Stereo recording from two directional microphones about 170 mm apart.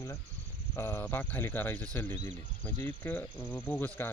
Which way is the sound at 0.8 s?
15° left (ahead or behind).